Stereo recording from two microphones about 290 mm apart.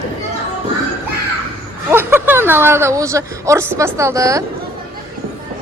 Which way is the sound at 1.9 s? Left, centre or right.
Centre.